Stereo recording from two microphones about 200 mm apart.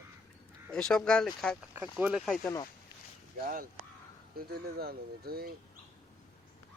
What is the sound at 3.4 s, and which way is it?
Speech, 45° right (ahead or behind).